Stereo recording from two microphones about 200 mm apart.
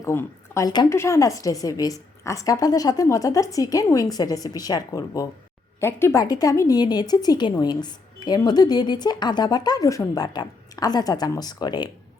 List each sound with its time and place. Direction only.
0.0 s a woman's voice: 15° left (ahead or behind)